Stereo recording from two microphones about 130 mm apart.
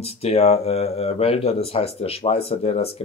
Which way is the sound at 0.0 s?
50° left (ahead or behind).